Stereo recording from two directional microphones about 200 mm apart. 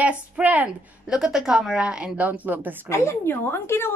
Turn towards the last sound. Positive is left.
turn(degrees=10)  # may be behind; listen again after turning